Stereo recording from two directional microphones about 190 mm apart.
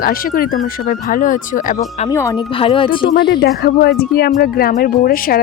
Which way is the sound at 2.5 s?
30° left (ahead or behind).